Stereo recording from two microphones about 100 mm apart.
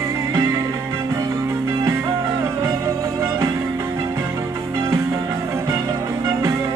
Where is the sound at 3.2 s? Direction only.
25° right (ahead or behind).